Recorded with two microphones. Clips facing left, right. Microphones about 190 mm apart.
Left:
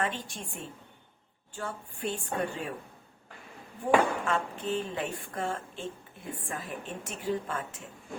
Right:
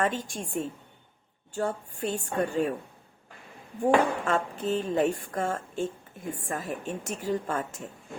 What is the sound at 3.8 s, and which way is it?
Speech, 40° right (ahead or behind).